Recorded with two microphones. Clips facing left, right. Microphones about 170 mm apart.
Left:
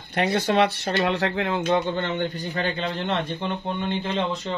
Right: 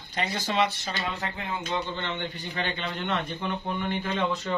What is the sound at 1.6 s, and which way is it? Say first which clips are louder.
A man's voice: left 7 dB; 55° left (ahead or behind).